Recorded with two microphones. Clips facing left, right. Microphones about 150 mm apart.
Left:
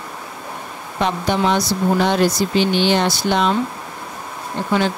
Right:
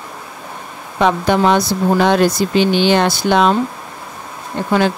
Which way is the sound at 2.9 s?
55° right (ahead or behind).